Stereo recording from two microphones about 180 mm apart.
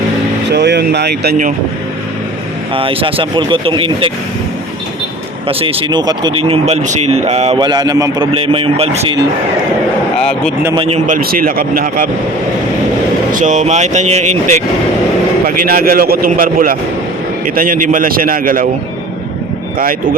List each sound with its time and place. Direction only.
0.5 s speech: 65° right (ahead or behind)
2.7 s speech: 30° right (ahead or behind)
5.5 s speech: 30° right (ahead or behind)
7.6 s speech: 25° right (ahead or behind)
8.3 s speech: 30° right (ahead or behind)
10.8 s a man's voice: 35° right (ahead or behind); by 12.0 s 55° right (ahead or behind)
13.3 s speech: 40° right (ahead or behind)
15.4 s a man's voice: 55° right (ahead or behind)